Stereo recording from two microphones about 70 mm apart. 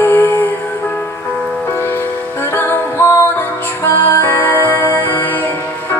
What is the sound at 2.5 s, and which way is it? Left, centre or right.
Music, left.